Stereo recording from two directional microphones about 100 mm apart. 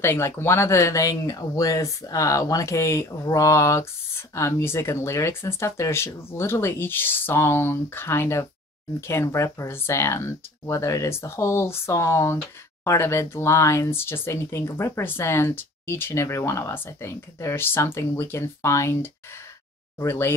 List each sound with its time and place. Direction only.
0.0 s speech: 25° left (ahead or behind)
20.0 s speech: 25° left (ahead or behind)